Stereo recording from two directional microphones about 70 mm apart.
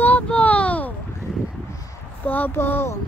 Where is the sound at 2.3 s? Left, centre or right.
Left.